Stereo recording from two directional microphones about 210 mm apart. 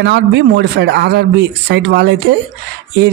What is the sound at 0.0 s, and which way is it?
Speech, 55° right (ahead or behind).